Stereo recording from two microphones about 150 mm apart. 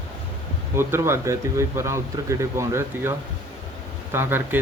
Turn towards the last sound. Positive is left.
turn(degrees=-15)  # may be behind; listen again after turning